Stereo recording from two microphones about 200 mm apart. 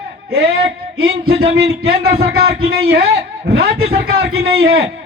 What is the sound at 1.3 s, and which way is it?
Speech, 30° right (ahead or behind).